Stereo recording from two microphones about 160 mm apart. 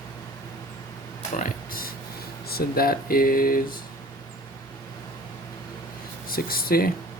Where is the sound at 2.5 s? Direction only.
70° left (ahead or behind).